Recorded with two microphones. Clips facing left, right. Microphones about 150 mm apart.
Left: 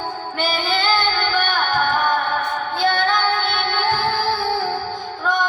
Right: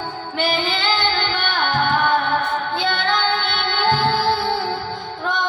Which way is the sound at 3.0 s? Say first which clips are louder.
Left 1 dB; 25° right (ahead or behind).